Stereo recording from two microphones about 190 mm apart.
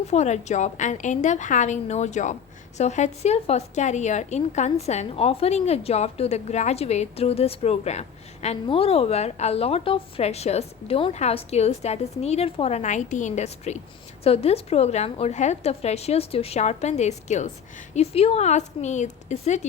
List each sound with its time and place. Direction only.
0.1 s a woman's voice: 35° left (ahead or behind)